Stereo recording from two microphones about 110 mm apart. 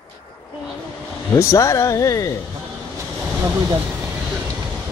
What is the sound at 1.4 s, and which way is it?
Speech, 25° left (ahead or behind).